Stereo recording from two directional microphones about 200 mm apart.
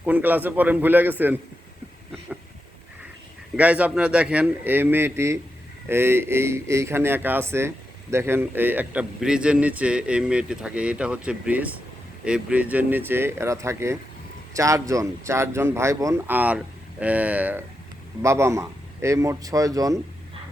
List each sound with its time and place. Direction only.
0.0 s a man's voice: 10° right (ahead or behind)
3.6 s a man's voice: 5° right (ahead or behind)